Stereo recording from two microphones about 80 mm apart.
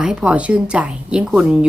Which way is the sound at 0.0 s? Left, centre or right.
Centre.